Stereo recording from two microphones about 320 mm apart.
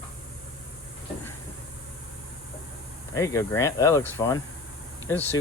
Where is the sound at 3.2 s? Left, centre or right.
Centre.